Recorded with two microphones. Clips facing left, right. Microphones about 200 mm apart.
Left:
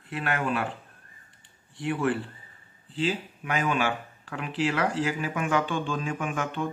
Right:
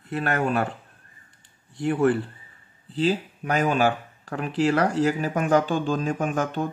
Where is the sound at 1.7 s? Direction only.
40° right (ahead or behind).